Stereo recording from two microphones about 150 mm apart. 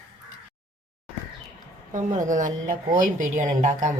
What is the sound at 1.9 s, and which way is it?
A woman's voice, 60° right (ahead or behind).